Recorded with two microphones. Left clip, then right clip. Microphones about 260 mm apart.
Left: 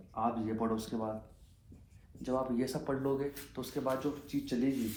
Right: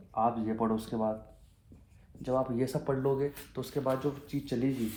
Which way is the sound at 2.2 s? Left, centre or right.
Right.